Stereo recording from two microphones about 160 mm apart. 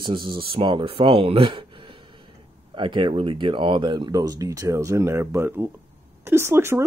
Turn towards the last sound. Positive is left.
turn(degrees=-15)  # may be behind; listen again after turning